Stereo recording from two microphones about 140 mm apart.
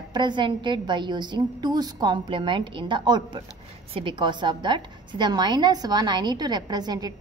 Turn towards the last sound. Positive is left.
turn(degrees=-30)  # may be behind; listen again after turning